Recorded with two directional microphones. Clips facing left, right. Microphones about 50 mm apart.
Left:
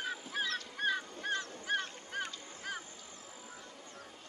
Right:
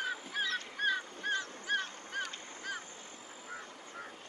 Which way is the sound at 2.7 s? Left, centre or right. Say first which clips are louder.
Right 1 dB; centre.